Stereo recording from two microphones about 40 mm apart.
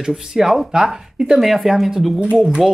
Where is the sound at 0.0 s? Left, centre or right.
Centre.